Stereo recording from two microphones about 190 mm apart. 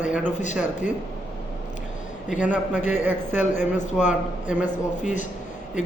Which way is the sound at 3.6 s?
40° left (ahead or behind).